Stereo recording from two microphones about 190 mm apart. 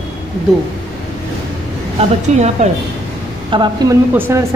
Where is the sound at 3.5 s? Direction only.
25° right (ahead or behind).